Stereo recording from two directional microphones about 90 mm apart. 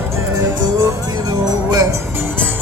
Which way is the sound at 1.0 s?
50° right (ahead or behind).